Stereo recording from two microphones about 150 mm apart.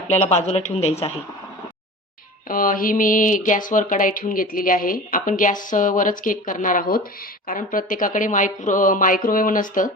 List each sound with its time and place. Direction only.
0.1 s speech: 50° left (ahead or behind)
2.5 s speech: 70° left (ahead or behind)